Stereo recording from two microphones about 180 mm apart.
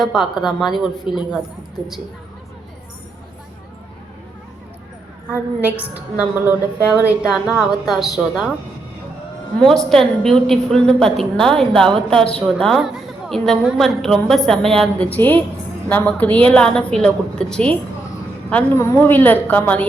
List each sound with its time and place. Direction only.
0.0 s a woman's voice: centre (ahead or behind)
1.1 s speech: 30° left (ahead or behind)
5.3 s a woman's voice: 10° right (ahead or behind)
9.6 s a woman's voice: 5° left (ahead or behind)